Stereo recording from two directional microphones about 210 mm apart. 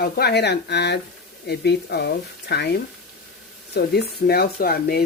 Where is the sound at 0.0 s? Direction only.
50° left (ahead or behind).